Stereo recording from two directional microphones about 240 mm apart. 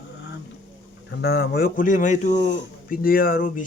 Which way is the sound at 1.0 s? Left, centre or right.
Left.